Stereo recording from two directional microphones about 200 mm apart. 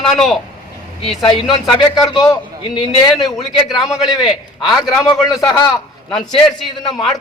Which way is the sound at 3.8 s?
15° left (ahead or behind).